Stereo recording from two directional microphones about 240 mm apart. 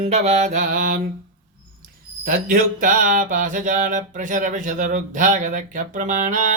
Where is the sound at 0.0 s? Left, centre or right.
Right.